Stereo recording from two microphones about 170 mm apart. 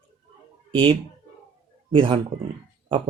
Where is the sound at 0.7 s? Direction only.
30° right (ahead or behind).